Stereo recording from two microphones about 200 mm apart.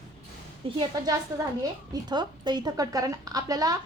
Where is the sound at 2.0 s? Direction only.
20° right (ahead or behind).